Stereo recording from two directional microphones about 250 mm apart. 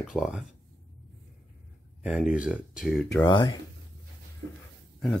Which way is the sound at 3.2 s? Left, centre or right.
Centre.